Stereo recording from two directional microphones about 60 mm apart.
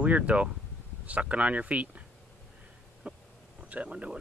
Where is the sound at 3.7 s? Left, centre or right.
Right.